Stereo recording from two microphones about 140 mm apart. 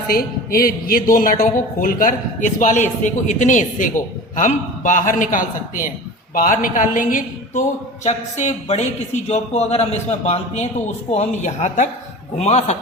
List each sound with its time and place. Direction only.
0.1 s a man's voice: 90° left; by 7.6 s 70° left (ahead or behind)
8.0 s a man's voice: 55° left (ahead or behind)